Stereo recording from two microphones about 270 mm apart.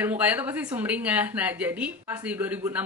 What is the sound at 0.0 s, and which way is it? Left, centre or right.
Speech, centre.